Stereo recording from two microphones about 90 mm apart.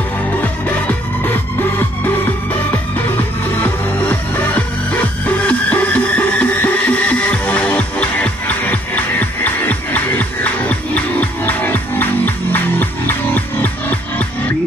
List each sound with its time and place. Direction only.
0.4 s music: 20° left (ahead or behind)
3.6 s music: 15° left (ahead or behind)